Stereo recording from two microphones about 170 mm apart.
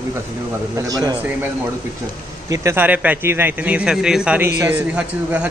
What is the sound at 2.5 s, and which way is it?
A man's voice, 15° right (ahead or behind).